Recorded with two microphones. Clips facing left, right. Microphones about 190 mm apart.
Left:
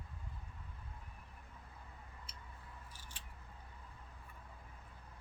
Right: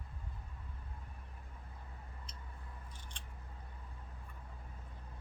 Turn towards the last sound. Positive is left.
turn(degrees=5)  # may be behind; listen again after turning